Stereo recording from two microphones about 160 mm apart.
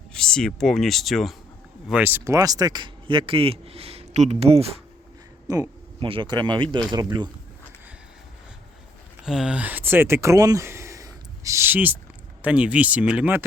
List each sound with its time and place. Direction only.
0.1 s speech: 5° left (ahead or behind)
1.9 s speech: 10° right (ahead or behind); by 4.8 s 40° right (ahead or behind)
5.5 s speech: 25° right (ahead or behind)
9.2 s speech: 5° right (ahead or behind)